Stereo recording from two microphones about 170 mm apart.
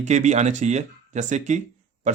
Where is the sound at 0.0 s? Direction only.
45° right (ahead or behind).